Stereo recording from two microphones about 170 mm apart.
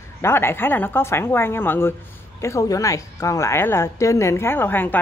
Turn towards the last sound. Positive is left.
turn(degrees=10)  # may be behind; listen again after turning